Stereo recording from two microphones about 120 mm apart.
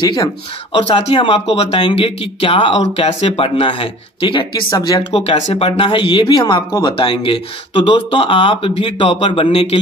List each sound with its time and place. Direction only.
0.0 s speech: 35° left (ahead or behind)
0.7 s speech: 55° left (ahead or behind)
4.6 s speech: 30° left (ahead or behind)
5.1 s speech: 55° left (ahead or behind)